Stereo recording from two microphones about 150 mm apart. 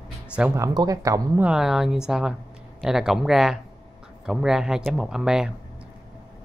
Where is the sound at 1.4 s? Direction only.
5° right (ahead or behind).